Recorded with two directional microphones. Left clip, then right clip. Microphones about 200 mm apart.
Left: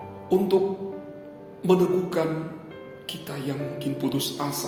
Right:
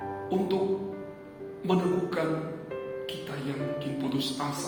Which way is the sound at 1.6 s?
50° left (ahead or behind).